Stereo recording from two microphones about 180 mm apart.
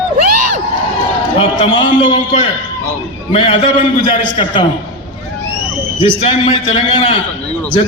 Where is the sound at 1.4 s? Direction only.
35° left (ahead or behind).